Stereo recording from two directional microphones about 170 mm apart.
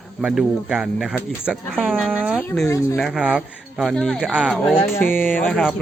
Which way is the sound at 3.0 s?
5° right (ahead or behind).